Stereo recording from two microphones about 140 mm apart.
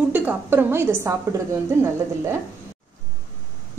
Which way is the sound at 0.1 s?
15° right (ahead or behind).